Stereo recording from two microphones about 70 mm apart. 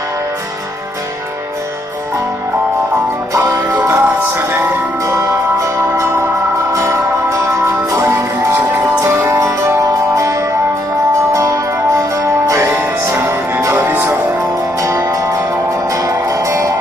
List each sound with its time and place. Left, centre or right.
3.7 s music: right
5.0 s music: right
13.8 s music: right
15.0 s music: right